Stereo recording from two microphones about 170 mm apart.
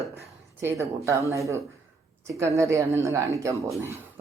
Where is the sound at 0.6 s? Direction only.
15° right (ahead or behind).